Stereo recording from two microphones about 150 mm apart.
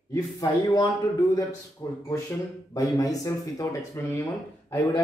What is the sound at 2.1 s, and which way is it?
Speech, 20° left (ahead or behind).